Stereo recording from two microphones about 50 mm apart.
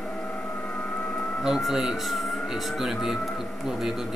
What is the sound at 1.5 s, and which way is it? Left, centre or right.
Speech, centre.